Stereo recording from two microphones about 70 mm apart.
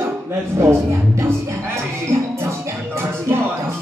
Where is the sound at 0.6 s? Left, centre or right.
Right.